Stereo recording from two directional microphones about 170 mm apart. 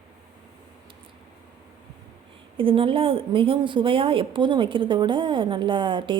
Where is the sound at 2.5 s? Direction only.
30° right (ahead or behind).